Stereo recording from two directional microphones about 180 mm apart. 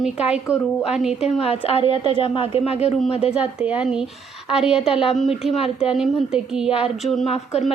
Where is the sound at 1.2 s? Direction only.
35° left (ahead or behind).